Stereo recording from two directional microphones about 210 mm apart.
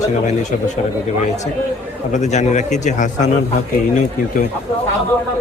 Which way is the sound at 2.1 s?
35° left (ahead or behind).